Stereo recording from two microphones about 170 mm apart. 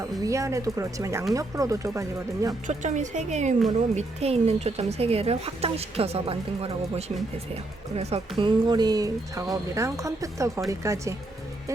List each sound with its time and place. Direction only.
0.0 s speech: 20° right (ahead or behind)
2.6 s speech: 45° right (ahead or behind); by 11.1 s 15° right (ahead or behind)